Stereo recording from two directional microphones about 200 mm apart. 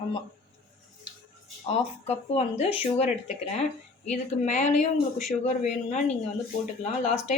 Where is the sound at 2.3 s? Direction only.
30° left (ahead or behind).